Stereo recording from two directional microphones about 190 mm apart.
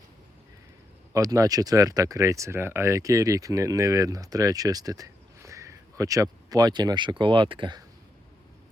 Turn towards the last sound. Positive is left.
turn(degrees=-25)  # may be behind; listen again after turning